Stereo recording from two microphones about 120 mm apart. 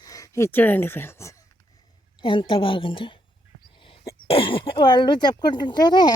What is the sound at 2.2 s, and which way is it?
Speech, 40° left (ahead or behind).